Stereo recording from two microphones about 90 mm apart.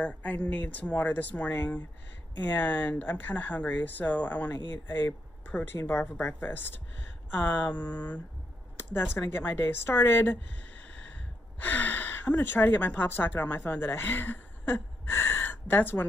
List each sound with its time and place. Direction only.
0.0 s speech: 15° left (ahead or behind)
5.8 s speech: 30° left (ahead or behind)
11.6 s speech: 20° left (ahead or behind)